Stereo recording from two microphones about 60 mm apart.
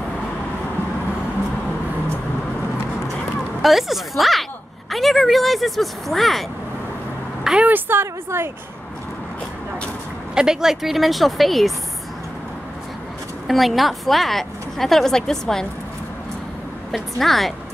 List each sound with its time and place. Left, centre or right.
3.6 s a woman's voice: centre
7.6 s speech: right
10.3 s a woman's voice: centre
13.5 s a woman's voice: centre
17.2 s a woman's voice: centre